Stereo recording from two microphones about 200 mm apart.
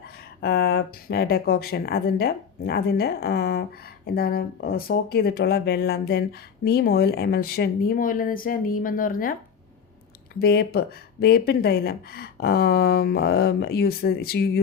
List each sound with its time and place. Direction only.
0.4 s speech: 50° left (ahead or behind)
10.4 s speech: 50° left (ahead or behind)